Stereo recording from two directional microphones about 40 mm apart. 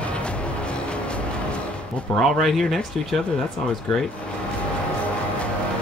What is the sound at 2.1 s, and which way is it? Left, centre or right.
Speech, centre.